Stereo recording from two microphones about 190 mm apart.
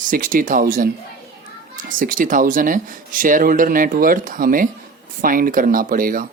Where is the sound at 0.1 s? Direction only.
45° right (ahead or behind).